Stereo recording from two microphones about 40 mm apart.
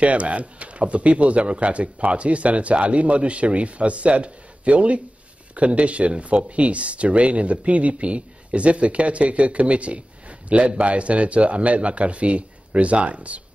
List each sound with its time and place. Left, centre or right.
0.0 s speech: right